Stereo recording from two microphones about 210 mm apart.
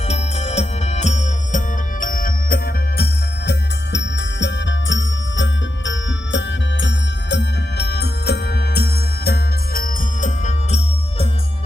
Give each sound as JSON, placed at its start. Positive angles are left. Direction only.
{"t": 0.1, "sound": "music", "side_deg": 30}
{"t": 3.0, "sound": "music", "side_deg": 50}